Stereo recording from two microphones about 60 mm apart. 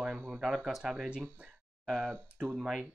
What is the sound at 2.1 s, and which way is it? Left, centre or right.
Speech, centre.